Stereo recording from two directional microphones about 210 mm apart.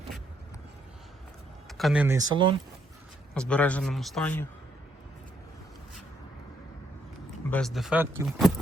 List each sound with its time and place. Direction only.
1.8 s speech: 5° right (ahead or behind)
2.1 s speech: 20° right (ahead or behind)
3.3 s speech: 5° left (ahead or behind)
7.5 s speech: centre (ahead or behind)